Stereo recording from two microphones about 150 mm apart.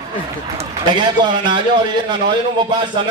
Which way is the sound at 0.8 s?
30° right (ahead or behind).